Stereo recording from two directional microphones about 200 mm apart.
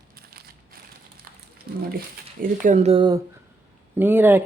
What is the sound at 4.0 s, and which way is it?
Speech, 10° right (ahead or behind).